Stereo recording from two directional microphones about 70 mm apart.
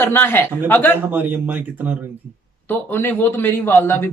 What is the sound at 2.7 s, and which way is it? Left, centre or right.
Speech, left.